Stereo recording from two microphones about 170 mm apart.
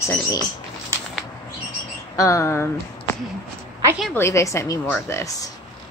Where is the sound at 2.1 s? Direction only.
20° left (ahead or behind).